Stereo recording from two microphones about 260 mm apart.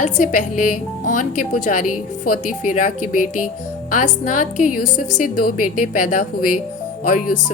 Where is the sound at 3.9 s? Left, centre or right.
Left.